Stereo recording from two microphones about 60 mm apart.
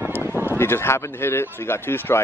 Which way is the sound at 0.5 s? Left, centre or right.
Left.